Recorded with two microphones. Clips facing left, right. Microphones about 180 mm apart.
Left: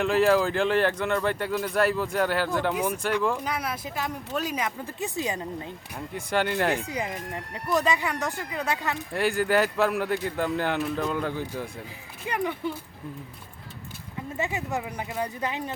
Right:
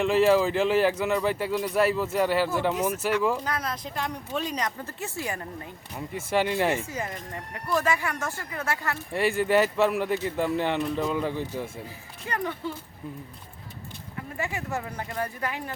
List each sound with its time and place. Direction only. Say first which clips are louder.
0.0 s speech: right 1 dB; centre (ahead or behind)
3.4 s speech: even; 10° left (ahead or behind)
6.1 s speech: right 1 dB; centre (ahead or behind)
6.8 s speech: left 2 dB; 15° left (ahead or behind)
9.1 s speech: right 1 dB; centre (ahead or behind)
12.3 s speech: left 2 dB; 15° left (ahead or behind)
14.3 s speech: left 2 dB; 20° left (ahead or behind)